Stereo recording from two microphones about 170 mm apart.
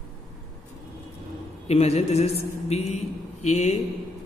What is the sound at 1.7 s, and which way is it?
A man's voice, 40° left (ahead or behind).